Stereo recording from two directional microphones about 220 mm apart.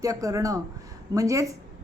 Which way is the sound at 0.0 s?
15° right (ahead or behind).